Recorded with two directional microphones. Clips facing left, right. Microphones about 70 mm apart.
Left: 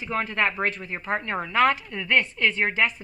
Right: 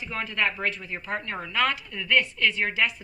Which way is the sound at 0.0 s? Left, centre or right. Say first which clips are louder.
Left 3 dB; left.